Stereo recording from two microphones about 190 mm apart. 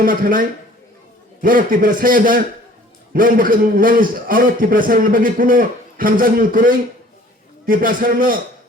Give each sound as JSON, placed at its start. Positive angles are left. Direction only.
{"t": 0.0, "sound": "a man's voice", "side_deg": -45}